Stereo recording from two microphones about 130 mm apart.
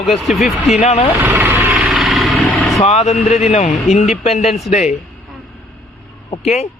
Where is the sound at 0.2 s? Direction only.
Centre (ahead or behind).